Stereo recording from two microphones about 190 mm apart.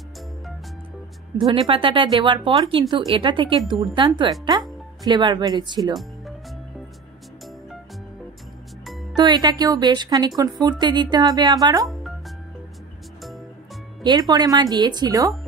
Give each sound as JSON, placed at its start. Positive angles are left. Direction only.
{"t": 1.4, "sound": "a woman's voice", "side_deg": -25}
{"t": 9.1, "sound": "a woman's voice", "side_deg": -20}
{"t": 11.8, "sound": "music", "side_deg": 0}
{"t": 14.0, "sound": "a woman's voice", "side_deg": -20}